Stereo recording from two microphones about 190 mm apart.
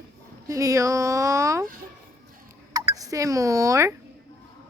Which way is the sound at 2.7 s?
20° right (ahead or behind).